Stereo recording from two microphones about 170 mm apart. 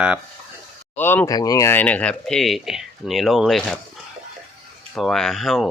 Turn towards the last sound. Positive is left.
turn(degrees=0)  # may be behind; listen again after turning